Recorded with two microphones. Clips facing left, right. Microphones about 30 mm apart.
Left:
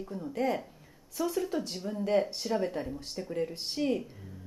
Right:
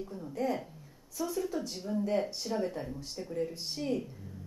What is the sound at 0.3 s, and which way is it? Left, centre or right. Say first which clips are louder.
Speech: left 2 dB; left.